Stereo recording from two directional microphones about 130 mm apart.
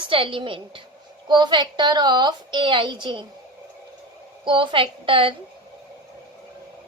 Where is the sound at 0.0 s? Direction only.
40° right (ahead or behind).